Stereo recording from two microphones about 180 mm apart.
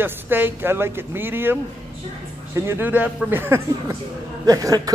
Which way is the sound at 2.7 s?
10° right (ahead or behind).